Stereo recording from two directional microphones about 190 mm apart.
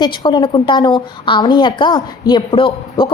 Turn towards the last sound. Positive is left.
turn(degrees=25)  # may be behind; listen again after turning